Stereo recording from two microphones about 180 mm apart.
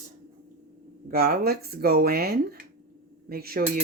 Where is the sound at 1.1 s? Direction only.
60° right (ahead or behind).